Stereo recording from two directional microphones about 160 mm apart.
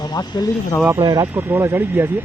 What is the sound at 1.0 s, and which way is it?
Speech, 25° right (ahead or behind).